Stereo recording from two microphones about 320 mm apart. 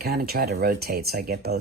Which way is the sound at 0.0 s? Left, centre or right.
Right.